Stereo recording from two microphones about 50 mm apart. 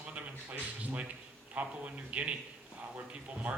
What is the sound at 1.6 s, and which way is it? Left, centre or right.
A man's voice, right.